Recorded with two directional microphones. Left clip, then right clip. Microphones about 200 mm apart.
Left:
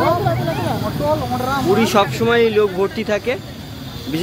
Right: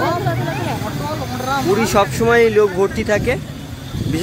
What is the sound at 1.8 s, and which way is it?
Speech, 10° right (ahead or behind).